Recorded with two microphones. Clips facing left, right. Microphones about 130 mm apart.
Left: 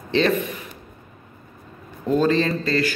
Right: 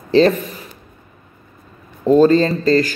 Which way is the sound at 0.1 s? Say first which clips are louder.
Right 8 dB; 35° right (ahead or behind).